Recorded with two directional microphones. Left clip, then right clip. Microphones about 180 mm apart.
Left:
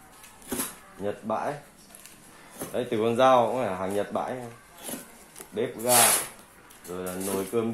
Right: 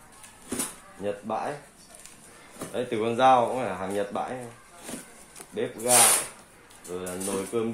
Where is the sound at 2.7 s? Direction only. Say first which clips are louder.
Left 2 dB; 40° left (ahead or behind).